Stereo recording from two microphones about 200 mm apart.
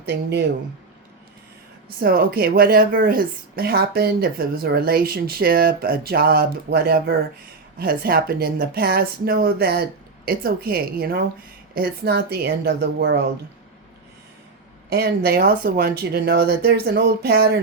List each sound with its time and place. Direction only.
0.1 s a woman's voice: 55° right (ahead or behind)
2.0 s a woman's voice: 50° right (ahead or behind)
14.9 s a woman's voice: 50° right (ahead or behind)